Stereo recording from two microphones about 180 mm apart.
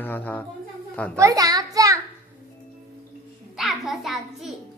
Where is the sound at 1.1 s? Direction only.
20° right (ahead or behind).